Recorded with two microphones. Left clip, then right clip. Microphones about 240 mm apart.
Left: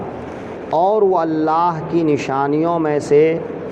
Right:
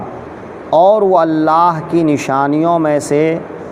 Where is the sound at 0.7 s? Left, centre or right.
Right.